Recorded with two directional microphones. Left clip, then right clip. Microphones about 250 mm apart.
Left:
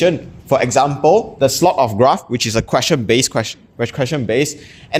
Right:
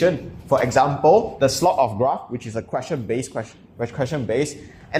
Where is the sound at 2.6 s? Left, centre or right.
Left.